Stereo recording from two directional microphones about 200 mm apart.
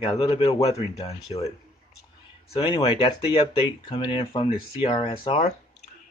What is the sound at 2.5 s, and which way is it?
Speech, 25° left (ahead or behind).